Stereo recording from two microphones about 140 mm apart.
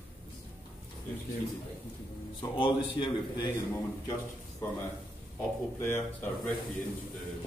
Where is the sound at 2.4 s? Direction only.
35° left (ahead or behind).